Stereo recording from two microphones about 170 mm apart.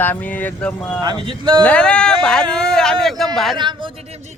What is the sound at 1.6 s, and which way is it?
Speech, 5° left (ahead or behind).